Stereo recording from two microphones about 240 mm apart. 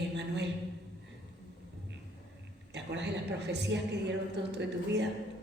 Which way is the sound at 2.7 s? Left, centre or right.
Right.